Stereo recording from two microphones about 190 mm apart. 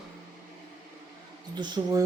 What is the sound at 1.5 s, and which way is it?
Speech, 20° right (ahead or behind).